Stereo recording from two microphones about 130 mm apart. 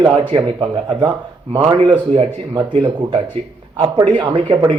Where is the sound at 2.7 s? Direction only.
45° right (ahead or behind).